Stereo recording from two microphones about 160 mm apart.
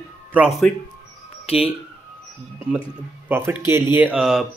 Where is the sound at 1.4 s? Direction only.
35° left (ahead or behind).